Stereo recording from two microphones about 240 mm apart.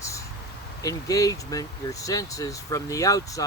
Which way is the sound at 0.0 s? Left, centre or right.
Centre.